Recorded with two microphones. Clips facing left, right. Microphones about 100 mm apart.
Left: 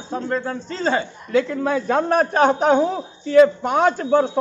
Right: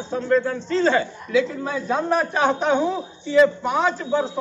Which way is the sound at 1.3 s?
65° left (ahead or behind).